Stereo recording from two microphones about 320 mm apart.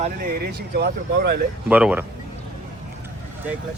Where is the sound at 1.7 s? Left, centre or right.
Centre.